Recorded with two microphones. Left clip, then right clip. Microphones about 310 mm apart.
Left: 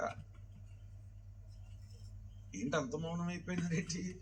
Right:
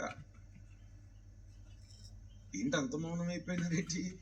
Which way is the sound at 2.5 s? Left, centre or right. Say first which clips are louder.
Right 1 dB; centre.